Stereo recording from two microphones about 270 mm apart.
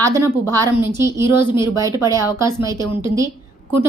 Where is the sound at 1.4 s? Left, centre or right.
Centre.